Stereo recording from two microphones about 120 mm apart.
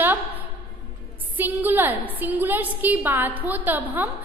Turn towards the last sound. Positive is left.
turn(degrees=-15)  # may be behind; listen again after turning